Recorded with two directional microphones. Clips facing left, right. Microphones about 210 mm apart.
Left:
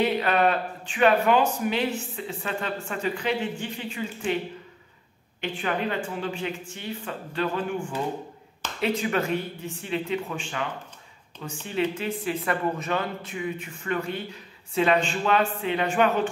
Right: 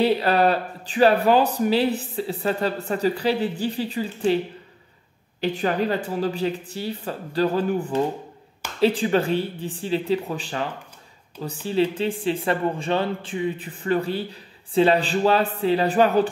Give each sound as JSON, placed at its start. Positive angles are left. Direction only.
{"t": 0.0, "sound": "speech", "side_deg": -35}
{"t": 5.4, "sound": "speech", "side_deg": -35}